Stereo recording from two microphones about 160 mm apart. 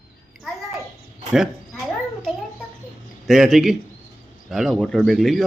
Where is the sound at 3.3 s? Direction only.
Centre (ahead or behind).